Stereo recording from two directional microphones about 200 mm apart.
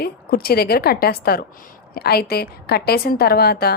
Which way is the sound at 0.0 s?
50° left (ahead or behind).